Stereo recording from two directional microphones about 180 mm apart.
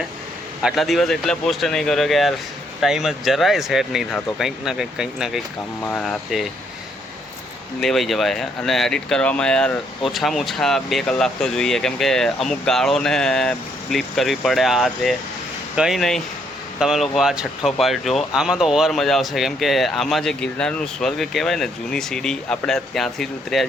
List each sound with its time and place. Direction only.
0.6 s speech: centre (ahead or behind)
7.8 s speech: centre (ahead or behind)